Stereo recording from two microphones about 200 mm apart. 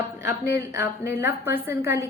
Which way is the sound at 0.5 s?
15° right (ahead or behind).